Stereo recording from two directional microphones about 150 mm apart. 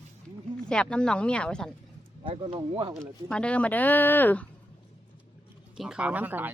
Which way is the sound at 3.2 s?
5° left (ahead or behind).